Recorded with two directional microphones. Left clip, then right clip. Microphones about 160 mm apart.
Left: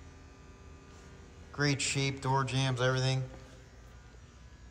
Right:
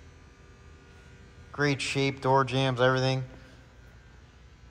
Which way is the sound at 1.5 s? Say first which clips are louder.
Right 4 dB; 5° left (ahead or behind).